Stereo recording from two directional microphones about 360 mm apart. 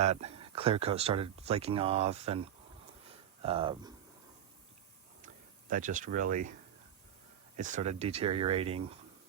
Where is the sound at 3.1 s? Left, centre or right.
Centre.